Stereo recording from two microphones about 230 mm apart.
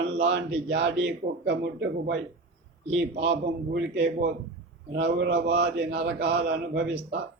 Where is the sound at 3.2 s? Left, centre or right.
Right.